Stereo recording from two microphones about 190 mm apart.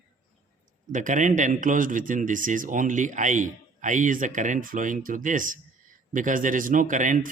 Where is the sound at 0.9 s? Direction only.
40° right (ahead or behind).